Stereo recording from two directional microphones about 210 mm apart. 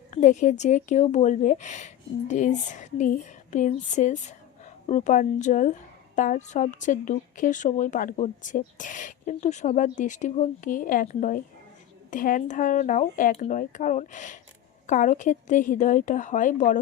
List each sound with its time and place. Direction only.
0.1 s a woman's voice: 35° left (ahead or behind)